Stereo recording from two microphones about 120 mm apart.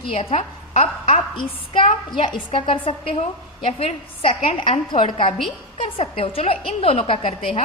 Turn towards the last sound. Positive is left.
turn(degrees=50)  # may be behind; listen again after turning